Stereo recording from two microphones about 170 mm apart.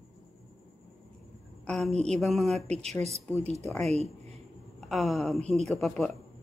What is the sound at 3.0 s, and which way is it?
Speech, 40° right (ahead or behind).